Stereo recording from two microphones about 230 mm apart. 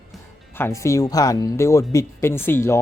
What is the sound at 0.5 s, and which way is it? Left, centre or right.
Speech, centre.